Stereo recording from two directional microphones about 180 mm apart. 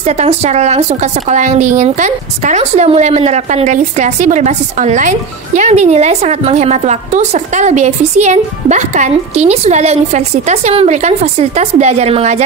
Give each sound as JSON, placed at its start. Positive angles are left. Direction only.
{"t": 0.0, "sound": "a woman's voice", "side_deg": -35}